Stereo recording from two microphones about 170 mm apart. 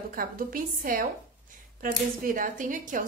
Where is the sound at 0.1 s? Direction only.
55° right (ahead or behind).